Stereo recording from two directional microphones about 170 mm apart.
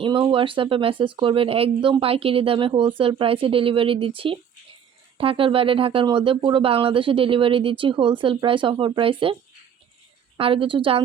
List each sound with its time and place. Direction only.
0.0 s speech: 30° right (ahead or behind)